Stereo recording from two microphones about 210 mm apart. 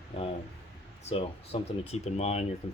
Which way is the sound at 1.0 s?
30° left (ahead or behind).